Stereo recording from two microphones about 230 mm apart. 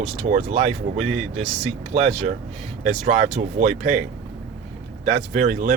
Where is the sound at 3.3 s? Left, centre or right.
Right.